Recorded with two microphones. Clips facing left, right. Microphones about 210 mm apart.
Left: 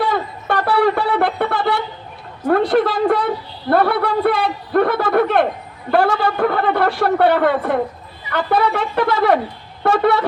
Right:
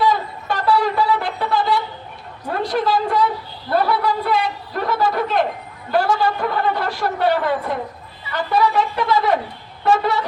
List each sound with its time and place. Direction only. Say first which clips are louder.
0.0 s a sound: right 1 dB; 60° left (ahead or behind)
2.5 s a woman's voice: left 5 dB; 60° left (ahead or behind)
9.8 s vehicle: left 3 dB; 60° left (ahead or behind)